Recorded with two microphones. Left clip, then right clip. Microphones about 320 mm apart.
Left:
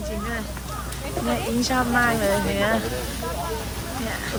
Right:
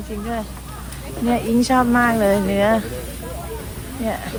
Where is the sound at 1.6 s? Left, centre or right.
Right.